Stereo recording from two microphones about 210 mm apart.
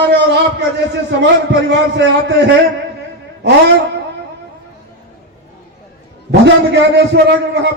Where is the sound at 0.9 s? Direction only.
55° right (ahead or behind).